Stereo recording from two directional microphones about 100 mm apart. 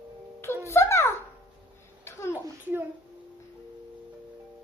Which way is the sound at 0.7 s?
25° left (ahead or behind).